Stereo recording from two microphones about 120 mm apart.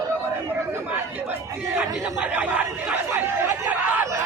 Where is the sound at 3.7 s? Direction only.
15° right (ahead or behind).